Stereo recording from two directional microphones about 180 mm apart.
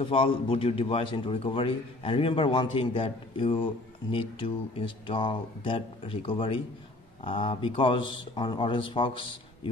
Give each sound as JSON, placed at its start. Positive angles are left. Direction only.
{"t": 0.0, "sound": "a man's voice", "side_deg": 30}